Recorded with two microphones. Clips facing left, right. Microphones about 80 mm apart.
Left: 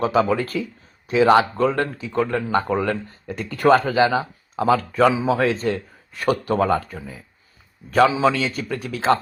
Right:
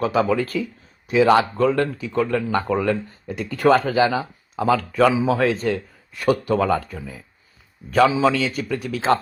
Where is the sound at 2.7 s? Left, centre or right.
Left.